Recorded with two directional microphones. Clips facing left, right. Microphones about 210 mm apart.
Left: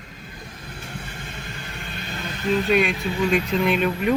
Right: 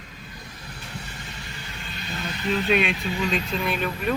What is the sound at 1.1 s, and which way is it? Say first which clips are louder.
Vehicle: left 3 dB; 55° left (ahead or behind).